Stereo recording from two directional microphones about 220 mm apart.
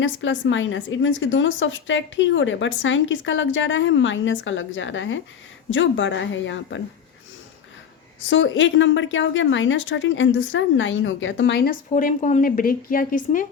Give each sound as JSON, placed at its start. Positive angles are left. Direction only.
{"t": 0.0, "sound": "speech", "side_deg": 60}
{"t": 8.3, "sound": "speech", "side_deg": 60}